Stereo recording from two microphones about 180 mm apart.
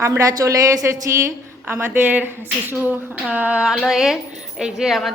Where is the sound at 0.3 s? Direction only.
20° right (ahead or behind).